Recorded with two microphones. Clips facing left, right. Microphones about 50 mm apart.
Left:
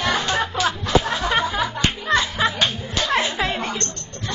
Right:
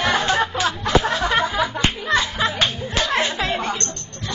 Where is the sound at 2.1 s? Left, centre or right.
Centre.